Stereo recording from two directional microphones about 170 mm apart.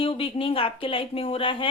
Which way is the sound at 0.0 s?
30° left (ahead or behind).